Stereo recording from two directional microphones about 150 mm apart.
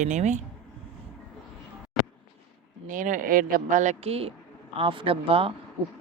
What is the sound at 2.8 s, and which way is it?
A woman's voice, 60° right (ahead or behind).